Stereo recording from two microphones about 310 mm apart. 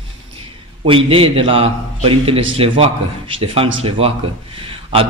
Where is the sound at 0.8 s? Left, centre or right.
Centre.